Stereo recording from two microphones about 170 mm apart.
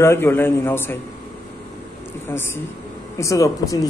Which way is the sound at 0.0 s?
15° left (ahead or behind).